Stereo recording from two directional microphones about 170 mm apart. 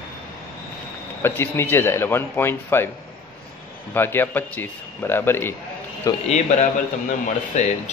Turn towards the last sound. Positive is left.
turn(degrees=45)  # may be behind; listen again after turning